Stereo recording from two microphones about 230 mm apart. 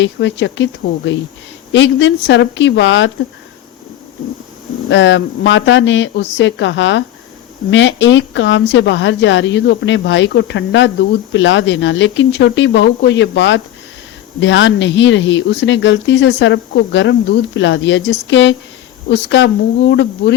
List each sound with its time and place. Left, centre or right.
0.0 s speech: left
4.9 s speech: left